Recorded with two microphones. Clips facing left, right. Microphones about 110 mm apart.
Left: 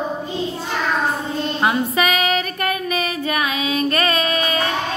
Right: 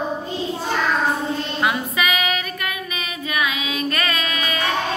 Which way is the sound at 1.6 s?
35° left (ahead or behind).